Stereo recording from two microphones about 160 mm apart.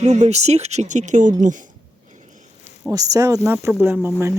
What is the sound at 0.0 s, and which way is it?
Speech, 45° right (ahead or behind).